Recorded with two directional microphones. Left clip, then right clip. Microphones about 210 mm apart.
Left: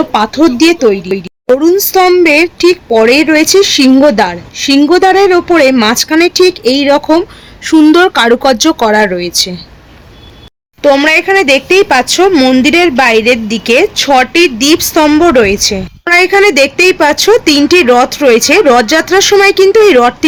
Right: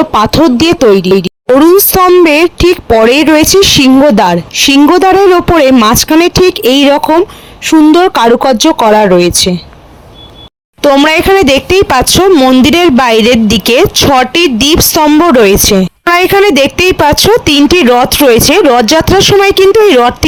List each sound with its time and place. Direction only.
0.1 s speech: 30° right (ahead or behind)
11.0 s speech: 40° right (ahead or behind)